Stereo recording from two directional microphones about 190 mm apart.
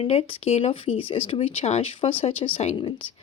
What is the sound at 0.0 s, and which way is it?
Speech, 30° left (ahead or behind).